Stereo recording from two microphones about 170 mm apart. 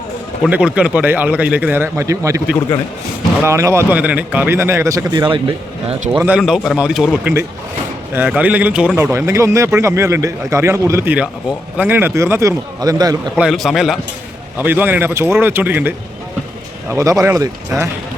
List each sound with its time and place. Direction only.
0.4 s speech: 5° right (ahead or behind)
3.4 s speech: 15° right (ahead or behind)
6.1 s a man's voice: 5° right (ahead or behind)
13.3 s a man's voice: centre (ahead or behind); by 17.5 s 20° right (ahead or behind)